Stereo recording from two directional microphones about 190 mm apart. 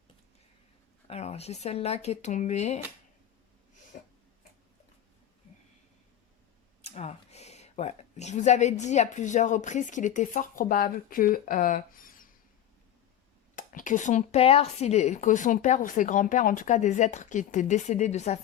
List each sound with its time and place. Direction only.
1.0 s speech: 35° left (ahead or behind)
3.9 s a sound: 45° left (ahead or behind)
6.8 s speech: 35° left (ahead or behind)
13.6 s speech: 45° left (ahead or behind)